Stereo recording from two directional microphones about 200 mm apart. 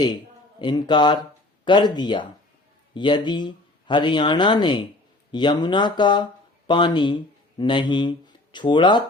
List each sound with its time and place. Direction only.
0.6 s speech: 25° left (ahead or behind)